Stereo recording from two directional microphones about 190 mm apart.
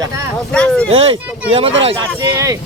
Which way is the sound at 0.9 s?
30° right (ahead or behind).